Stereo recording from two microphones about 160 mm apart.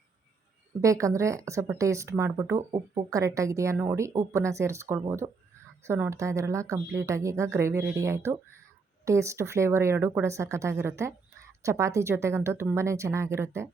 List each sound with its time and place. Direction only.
0.8 s speech: 20° right (ahead or behind)